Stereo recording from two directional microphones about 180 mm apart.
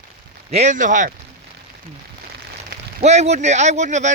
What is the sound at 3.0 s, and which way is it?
Speech, 40° right (ahead or behind).